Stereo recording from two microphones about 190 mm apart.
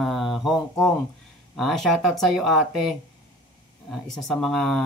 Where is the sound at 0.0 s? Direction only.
Centre (ahead or behind).